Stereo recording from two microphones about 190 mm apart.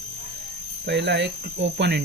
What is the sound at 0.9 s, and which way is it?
Speech, 65° right (ahead or behind).